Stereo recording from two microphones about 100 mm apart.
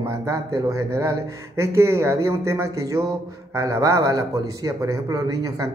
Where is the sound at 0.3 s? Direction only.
30° right (ahead or behind).